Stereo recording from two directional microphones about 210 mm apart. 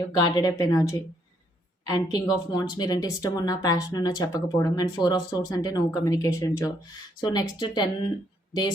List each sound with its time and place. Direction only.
0.2 s speech: 20° left (ahead or behind)